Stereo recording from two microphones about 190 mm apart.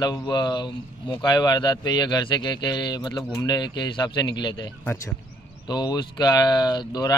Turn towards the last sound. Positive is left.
turn(degrees=20)  # may be behind; listen again after turning